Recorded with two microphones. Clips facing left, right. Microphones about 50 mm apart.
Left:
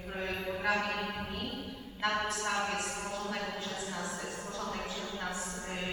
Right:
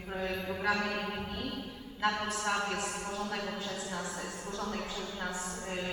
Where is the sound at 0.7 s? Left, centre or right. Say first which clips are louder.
Even; left.